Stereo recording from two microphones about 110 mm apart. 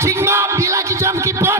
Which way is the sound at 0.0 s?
25° right (ahead or behind).